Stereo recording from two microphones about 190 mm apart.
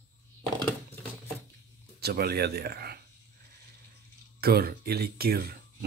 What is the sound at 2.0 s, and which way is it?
Speech, 55° right (ahead or behind).